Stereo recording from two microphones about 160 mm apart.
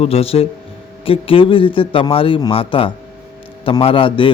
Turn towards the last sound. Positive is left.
turn(degrees=30)  # may be behind; listen again after turning